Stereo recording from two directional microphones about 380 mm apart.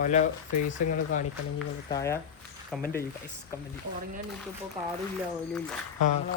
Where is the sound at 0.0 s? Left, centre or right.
Centre.